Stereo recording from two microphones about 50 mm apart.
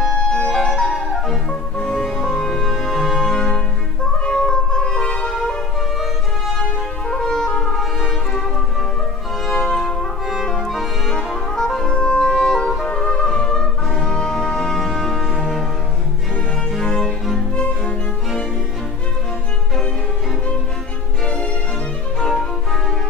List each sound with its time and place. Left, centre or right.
0.2 s music: centre
1.9 s music: centre
6.6 s music: centre
7.7 s music: centre
9.6 s music: centre
10.7 s music: centre
11.8 s music: centre
15.2 s music: centre
16.8 s music: centre
22.3 s music: centre